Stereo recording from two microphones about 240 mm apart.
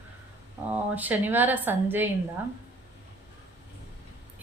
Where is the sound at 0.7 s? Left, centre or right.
Centre.